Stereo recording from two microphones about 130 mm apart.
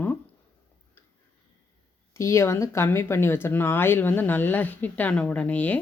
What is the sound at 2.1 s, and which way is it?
Speech, 20° left (ahead or behind).